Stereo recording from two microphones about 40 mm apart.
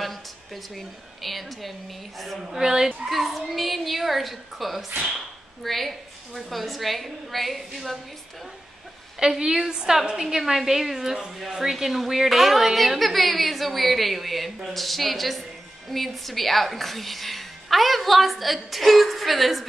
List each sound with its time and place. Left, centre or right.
0.7 s a woman's voice: centre
2.4 s a woman's voice: centre
9.2 s a woman's voice: centre
10.2 s a woman's voice: centre